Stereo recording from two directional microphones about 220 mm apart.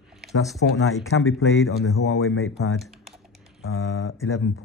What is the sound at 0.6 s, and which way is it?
Speech, 65° left (ahead or behind).